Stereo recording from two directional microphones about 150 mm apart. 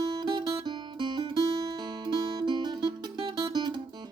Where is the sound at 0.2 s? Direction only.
30° right (ahead or behind).